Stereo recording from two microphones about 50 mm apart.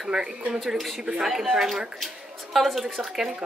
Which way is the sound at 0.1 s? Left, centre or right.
Centre.